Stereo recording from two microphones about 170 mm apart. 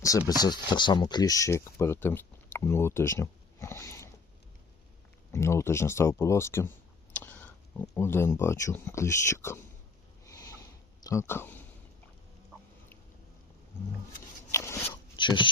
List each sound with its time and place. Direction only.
0.0 s speech: 20° left (ahead or behind)
5.3 s speech: 15° left (ahead or behind)
10.2 s a sound: 20° left (ahead or behind)
11.0 s speech: 15° left (ahead or behind)
14.5 s a sound: 15° left (ahead or behind)
14.8 s zipper: 30° left (ahead or behind)